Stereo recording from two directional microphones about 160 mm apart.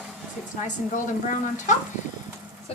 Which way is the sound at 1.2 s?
50° left (ahead or behind).